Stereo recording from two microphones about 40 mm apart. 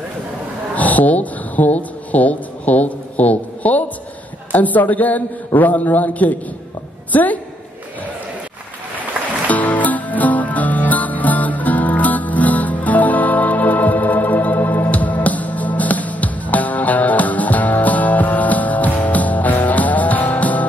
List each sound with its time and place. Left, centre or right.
0.7 s a sound: left
4.5 s a man's voice: left
9.5 s music: left